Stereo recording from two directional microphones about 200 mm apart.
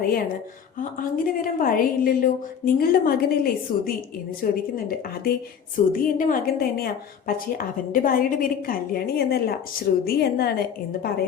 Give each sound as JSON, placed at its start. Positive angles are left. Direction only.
{"t": 0.8, "sound": "a woman's voice", "side_deg": 45}